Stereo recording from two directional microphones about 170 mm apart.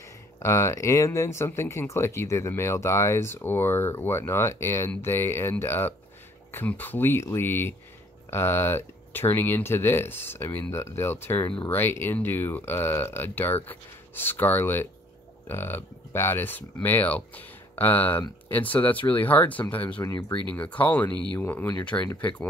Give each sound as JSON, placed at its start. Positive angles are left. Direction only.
{"t": 0.4, "sound": "speech", "side_deg": 15}